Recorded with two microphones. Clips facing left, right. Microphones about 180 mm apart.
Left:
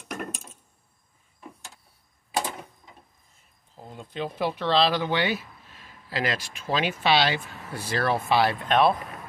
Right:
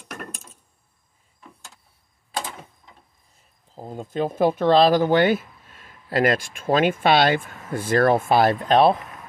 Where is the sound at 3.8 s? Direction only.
45° right (ahead or behind).